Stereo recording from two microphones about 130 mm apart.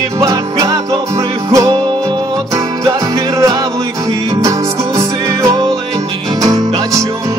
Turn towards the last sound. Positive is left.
turn(degrees=-30)  # may be behind; listen again after turning